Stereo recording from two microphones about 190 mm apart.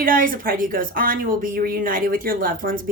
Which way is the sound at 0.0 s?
45° right (ahead or behind).